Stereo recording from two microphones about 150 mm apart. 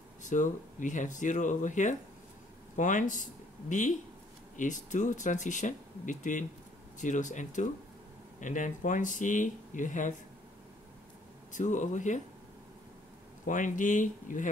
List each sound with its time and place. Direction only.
0.2 s speech: 55° left (ahead or behind)
11.5 s speech: 55° left (ahead or behind)
13.5 s speech: 60° left (ahead or behind)